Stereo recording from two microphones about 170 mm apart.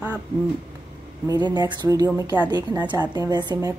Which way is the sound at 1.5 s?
25° right (ahead or behind).